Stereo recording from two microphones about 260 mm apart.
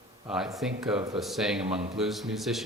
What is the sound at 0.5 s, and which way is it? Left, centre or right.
A man's voice, centre.